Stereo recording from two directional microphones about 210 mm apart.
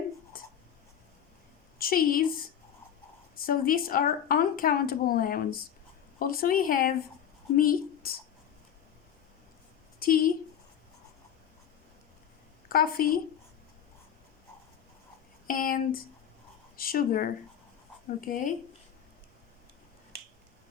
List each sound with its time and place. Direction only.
0.3 s writing: 45° left (ahead or behind)
1.8 s a woman's voice: 45° left (ahead or behind)
10.0 s speech: 45° left (ahead or behind)
12.6 s a woman's voice: 45° left (ahead or behind)
15.4 s a woman's voice: 40° left (ahead or behind)